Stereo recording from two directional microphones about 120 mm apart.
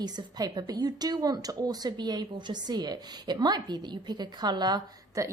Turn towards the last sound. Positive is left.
turn(degrees=-30)  # may be behind; listen again after turning